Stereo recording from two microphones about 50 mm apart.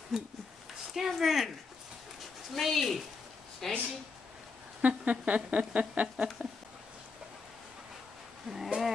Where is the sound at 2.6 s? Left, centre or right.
Centre.